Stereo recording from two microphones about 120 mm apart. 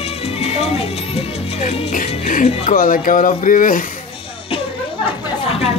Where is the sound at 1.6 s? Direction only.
70° left (ahead or behind); by 3.6 s 90° left.